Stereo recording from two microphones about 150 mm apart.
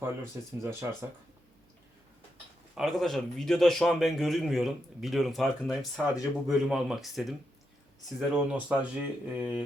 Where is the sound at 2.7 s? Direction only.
Centre (ahead or behind).